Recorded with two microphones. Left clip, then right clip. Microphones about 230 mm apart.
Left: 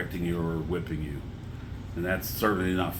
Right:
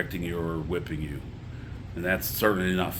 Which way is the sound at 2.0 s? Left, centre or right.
Right.